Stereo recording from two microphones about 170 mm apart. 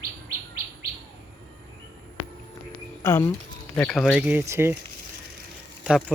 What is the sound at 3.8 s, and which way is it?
Speech, 5° left (ahead or behind).